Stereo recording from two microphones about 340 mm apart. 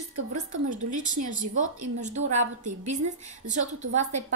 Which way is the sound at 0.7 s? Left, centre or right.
Right.